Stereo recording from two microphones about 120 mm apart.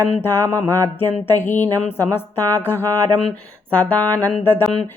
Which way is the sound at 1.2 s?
20° left (ahead or behind).